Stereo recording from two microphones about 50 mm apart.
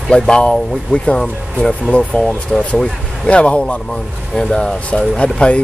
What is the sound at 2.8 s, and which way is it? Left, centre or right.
Speech, centre.